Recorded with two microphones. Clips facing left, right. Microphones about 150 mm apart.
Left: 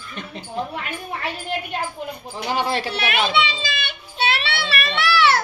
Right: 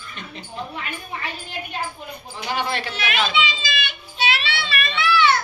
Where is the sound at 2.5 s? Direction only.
35° left (ahead or behind).